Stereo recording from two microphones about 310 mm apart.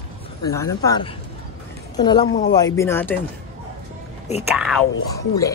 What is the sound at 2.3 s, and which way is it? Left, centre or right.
Speech, left.